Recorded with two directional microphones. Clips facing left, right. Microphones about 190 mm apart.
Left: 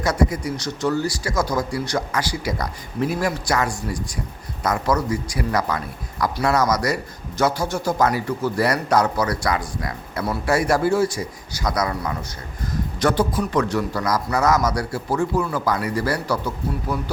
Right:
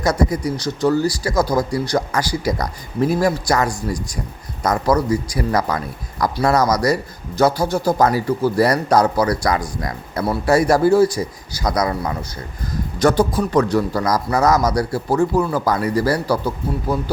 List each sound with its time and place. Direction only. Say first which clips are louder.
0.0 s speech: right 3 dB; 40° right (ahead or behind)